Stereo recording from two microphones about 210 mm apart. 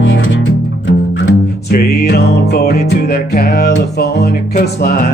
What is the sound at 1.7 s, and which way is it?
Music, 50° left (ahead or behind).